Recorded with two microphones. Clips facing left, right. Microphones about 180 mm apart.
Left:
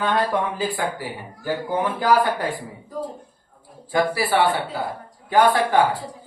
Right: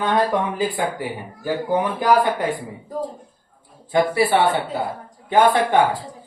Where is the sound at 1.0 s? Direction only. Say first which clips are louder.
Right 3 dB; 20° right (ahead or behind).